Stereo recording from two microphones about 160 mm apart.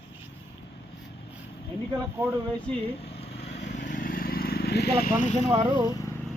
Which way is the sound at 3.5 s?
90° left.